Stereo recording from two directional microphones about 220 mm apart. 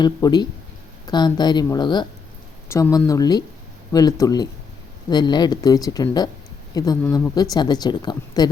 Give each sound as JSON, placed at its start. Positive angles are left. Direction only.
{"t": 0.0, "sound": "speech", "side_deg": 20}